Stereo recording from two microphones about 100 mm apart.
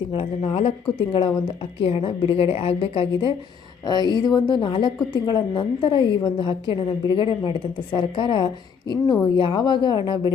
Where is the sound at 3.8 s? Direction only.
45° left (ahead or behind).